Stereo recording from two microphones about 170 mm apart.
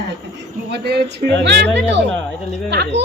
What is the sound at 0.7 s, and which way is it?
Speech, 75° right (ahead or behind).